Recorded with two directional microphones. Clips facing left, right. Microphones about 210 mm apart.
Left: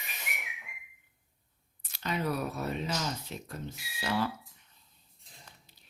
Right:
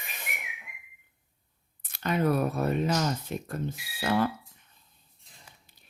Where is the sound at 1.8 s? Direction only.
55° right (ahead or behind).